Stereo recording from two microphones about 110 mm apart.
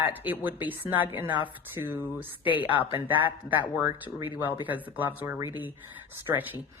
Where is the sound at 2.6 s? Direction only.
50° left (ahead or behind).